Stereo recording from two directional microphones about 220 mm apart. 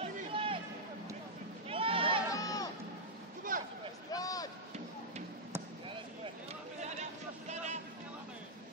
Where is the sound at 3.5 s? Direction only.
40° right (ahead or behind).